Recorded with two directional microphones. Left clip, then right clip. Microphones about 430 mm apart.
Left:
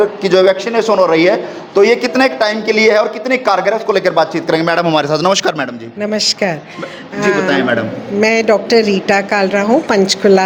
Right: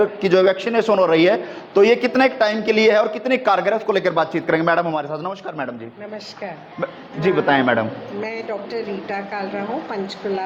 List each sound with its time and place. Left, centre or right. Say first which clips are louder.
0.0 s a man's voice: left 5 dB; centre
4.9 s a man's voice: left 12 dB; centre
6.0 s a woman's voice: left 16 dB; left
7.4 s a man's voice: left 3 dB; right
8.2 s a woman's voice: left 17 dB; left